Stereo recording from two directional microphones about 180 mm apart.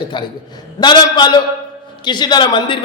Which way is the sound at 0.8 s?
25° left (ahead or behind).